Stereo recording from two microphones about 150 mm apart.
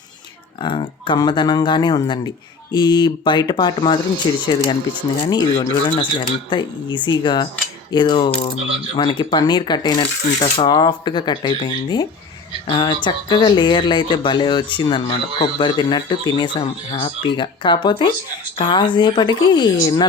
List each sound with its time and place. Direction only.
0.6 s speech: 35° left (ahead or behind)